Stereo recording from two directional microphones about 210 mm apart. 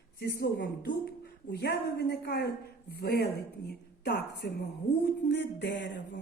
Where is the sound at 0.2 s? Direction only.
55° left (ahead or behind).